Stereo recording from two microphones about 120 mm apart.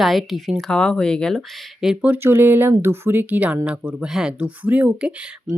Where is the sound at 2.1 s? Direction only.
15° right (ahead or behind).